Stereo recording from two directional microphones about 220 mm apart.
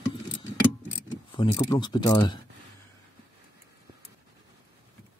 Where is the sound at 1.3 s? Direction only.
20° left (ahead or behind).